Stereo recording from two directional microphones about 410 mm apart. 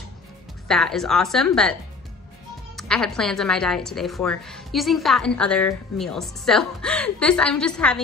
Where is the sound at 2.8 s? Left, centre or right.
Centre.